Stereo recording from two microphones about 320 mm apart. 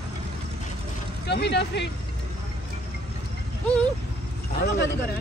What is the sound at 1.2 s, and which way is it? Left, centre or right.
Speech, left.